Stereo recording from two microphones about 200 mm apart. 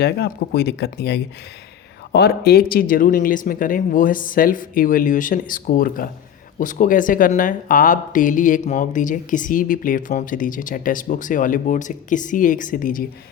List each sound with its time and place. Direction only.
0.0 s speech: 55° left (ahead or behind)